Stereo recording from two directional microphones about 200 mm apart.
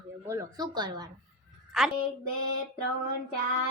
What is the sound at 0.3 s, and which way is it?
Speech, 20° right (ahead or behind).